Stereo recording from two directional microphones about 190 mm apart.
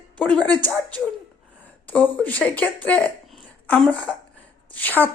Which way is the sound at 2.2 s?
10° left (ahead or behind).